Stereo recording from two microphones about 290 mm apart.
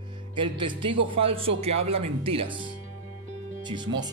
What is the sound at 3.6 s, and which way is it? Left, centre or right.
Speech, centre.